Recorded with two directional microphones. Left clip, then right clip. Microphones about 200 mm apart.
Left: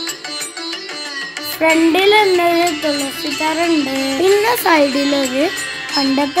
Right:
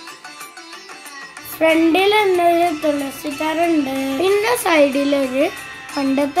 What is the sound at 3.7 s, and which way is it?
Music, 40° left (ahead or behind).